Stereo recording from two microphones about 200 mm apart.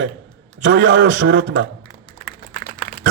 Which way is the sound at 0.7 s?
65° right (ahead or behind).